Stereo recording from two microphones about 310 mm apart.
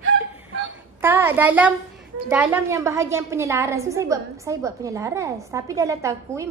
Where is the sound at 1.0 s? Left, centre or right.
Centre.